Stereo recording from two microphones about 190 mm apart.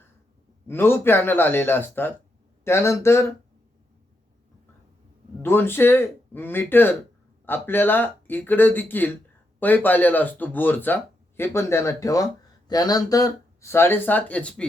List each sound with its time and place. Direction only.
0.7 s speech: 10° left (ahead or behind)
5.4 s speech: 10° left (ahead or behind)